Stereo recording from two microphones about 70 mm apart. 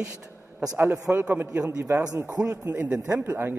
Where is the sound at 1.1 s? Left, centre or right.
Right.